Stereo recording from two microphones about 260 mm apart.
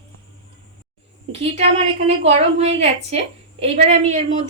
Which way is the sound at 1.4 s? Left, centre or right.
Right.